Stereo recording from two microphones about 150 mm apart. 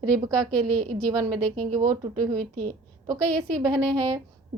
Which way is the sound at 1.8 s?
70° right (ahead or behind).